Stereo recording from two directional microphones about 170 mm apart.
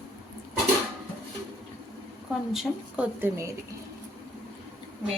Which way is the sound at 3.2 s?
15° right (ahead or behind).